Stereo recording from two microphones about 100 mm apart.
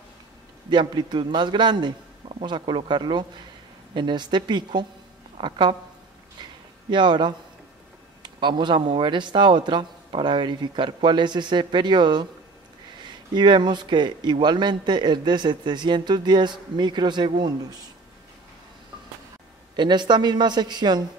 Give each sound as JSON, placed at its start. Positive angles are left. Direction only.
{"t": 0.7, "sound": "a man's voice", "side_deg": -50}
{"t": 6.9, "sound": "a man's voice", "side_deg": -50}
{"t": 19.7, "sound": "a man's voice", "side_deg": -50}